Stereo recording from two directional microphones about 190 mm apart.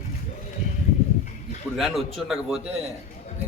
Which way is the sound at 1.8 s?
Centre (ahead or behind).